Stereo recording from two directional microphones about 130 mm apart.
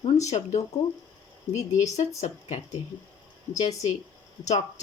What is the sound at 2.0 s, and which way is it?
Speech, 55° left (ahead or behind).